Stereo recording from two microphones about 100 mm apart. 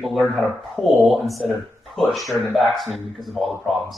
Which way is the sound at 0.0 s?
Centre (ahead or behind).